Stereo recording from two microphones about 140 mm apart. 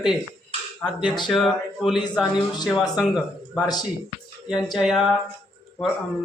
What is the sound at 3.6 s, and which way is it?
Speech, 30° left (ahead or behind).